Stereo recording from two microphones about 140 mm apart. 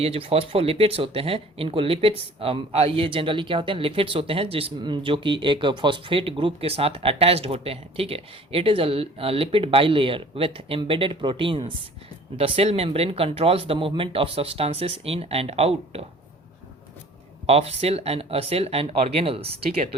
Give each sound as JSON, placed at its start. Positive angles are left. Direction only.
{"t": 0.0, "sound": "speech", "side_deg": -45}
{"t": 17.4, "sound": "speech", "side_deg": -45}